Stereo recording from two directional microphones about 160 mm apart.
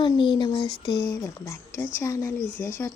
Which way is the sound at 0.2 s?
30° left (ahead or behind).